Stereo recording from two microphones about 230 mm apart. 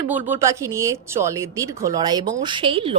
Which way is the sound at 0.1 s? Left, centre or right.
Centre.